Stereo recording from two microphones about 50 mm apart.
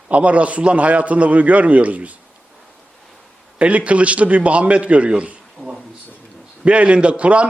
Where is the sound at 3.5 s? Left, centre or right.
Right.